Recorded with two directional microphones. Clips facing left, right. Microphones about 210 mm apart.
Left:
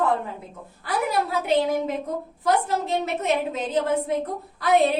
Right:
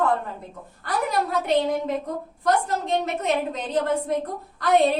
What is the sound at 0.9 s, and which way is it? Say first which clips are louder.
A woman's voice: even; centre (ahead or behind).